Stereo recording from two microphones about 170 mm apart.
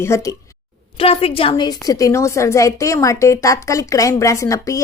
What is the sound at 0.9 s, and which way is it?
A woman's voice, 35° left (ahead or behind).